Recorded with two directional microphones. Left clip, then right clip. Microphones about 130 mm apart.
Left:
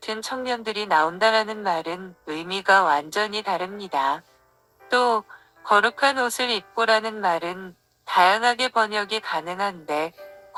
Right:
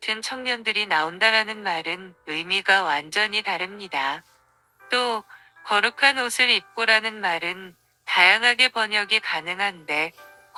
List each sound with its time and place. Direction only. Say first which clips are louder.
0.0 s a woman's voice: right 1 dB; 50° right (ahead or behind)